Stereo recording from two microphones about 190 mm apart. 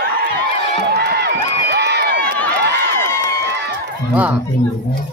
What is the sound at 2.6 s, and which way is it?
Crowd, 60° right (ahead or behind).